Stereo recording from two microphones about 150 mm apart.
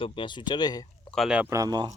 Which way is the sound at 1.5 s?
25° right (ahead or behind).